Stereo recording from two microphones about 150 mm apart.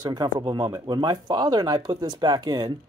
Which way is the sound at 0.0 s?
30° right (ahead or behind).